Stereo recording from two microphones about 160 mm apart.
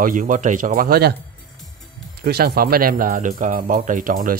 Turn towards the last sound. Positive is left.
turn(degrees=-60)  # may be behind; listen again after turning